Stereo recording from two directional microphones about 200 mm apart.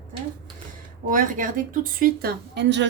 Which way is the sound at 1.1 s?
40° right (ahead or behind).